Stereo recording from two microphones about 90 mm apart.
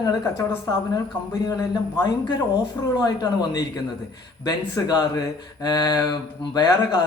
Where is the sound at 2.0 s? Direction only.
55° left (ahead or behind).